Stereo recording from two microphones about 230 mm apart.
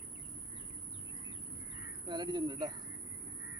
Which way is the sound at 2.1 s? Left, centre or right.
Centre.